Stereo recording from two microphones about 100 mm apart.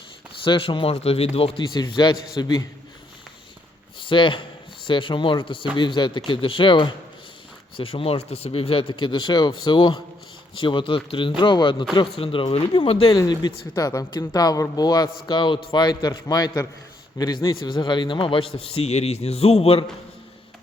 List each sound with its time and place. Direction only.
0.4 s a man's voice: 60° left (ahead or behind); by 2.6 s 40° left (ahead or behind)
4.0 s a man's voice: 55° left (ahead or behind)
12.1 s a man's voice: 70° left (ahead or behind)
13.1 s a man's voice: 40° left (ahead or behind); by 19.8 s 85° left